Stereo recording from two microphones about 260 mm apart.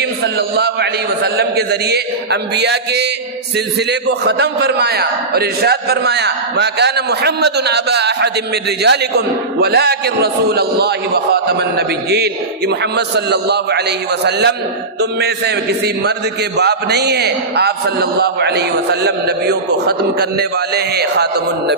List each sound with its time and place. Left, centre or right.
0.2 s a man's voice: right
4.2 s a man's voice: right